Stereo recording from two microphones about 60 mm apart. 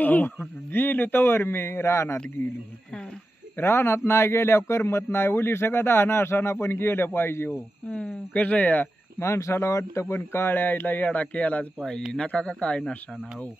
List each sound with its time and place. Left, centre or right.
0.0 s speech: left
3.5 s speech: left
7.9 s speech: centre
9.2 s speech: left